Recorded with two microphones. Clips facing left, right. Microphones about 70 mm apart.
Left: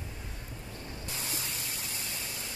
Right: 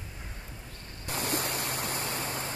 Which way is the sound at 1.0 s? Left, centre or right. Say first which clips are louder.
Right 10 dB; right.